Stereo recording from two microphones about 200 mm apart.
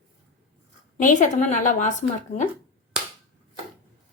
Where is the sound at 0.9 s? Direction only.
40° left (ahead or behind).